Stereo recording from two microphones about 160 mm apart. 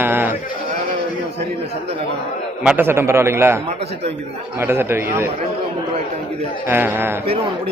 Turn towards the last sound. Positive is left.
turn(degrees=-15)  # may be behind; listen again after turning